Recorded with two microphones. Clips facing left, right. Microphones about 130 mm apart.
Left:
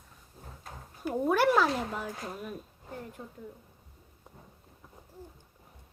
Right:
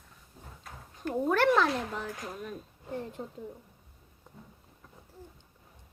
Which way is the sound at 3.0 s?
25° right (ahead or behind).